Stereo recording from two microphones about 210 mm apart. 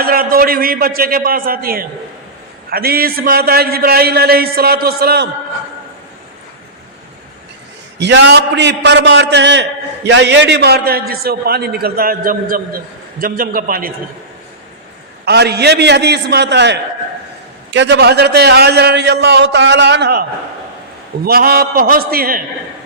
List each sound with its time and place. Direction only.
0.0 s a man's voice: 45° right (ahead or behind)
7.9 s a man's voice: 55° right (ahead or behind)
15.2 s a man's voice: 50° right (ahead or behind)
21.2 s a man's voice: 45° right (ahead or behind)